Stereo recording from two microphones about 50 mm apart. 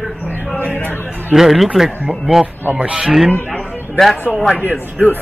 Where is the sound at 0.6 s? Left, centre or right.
Left.